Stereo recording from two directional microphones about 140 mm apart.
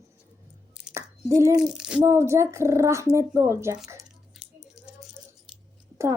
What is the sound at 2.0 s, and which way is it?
Speech, 20° right (ahead or behind).